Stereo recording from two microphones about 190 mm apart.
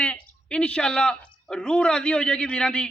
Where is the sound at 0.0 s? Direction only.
5° left (ahead or behind).